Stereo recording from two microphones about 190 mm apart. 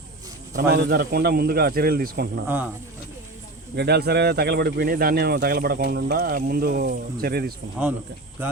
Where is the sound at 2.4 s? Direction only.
10° right (ahead or behind).